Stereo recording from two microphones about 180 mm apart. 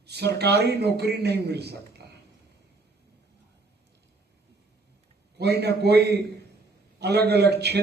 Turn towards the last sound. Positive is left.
turn(degrees=-65)  # may be behind; listen again after turning